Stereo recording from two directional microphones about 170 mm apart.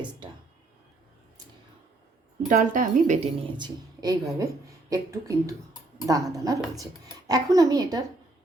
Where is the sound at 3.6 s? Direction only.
25° right (ahead or behind).